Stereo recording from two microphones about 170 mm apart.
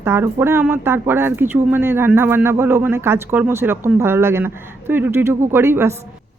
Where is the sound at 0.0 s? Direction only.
15° right (ahead or behind).